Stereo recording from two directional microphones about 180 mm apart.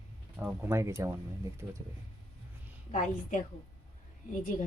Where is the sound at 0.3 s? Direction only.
10° right (ahead or behind).